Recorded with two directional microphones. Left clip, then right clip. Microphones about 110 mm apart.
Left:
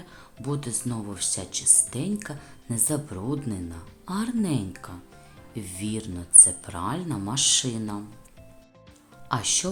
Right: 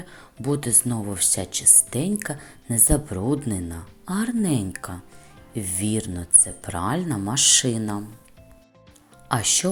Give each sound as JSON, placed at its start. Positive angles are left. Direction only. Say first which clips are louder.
{"t": 0.0, "sound": "speech", "louder": "right 6 dB", "side_deg": -35}
{"t": 4.0, "sound": "speech", "louder": "right 3 dB", "side_deg": -30}
{"t": 4.4, "sound": "speech", "louder": "right 4 dB", "side_deg": -45}
{"t": 5.5, "sound": "speech", "louder": "right 6 dB", "side_deg": -30}
{"t": 9.3, "sound": "speech", "louder": "right 3 dB", "side_deg": -30}